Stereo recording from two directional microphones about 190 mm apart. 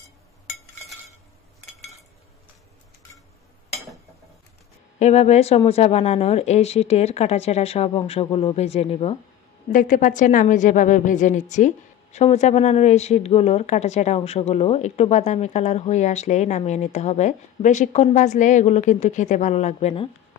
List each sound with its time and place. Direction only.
4.9 s a woman's voice: 35° left (ahead or behind)
9.7 s a woman's voice: 45° left (ahead or behind)